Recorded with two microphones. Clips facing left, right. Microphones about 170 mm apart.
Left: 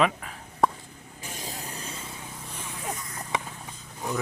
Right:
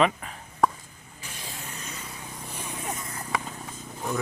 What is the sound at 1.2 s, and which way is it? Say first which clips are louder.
Vehicle: left 3 dB; 45° left (ahead or behind).